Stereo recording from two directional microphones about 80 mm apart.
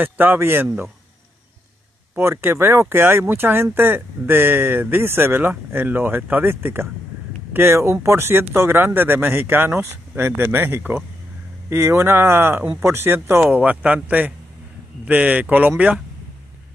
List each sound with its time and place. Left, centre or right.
0.0 s speech: right
2.1 s speech: right
13.6 s speech: right